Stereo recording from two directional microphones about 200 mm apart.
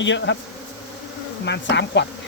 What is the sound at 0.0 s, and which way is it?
Speech, 65° left (ahead or behind).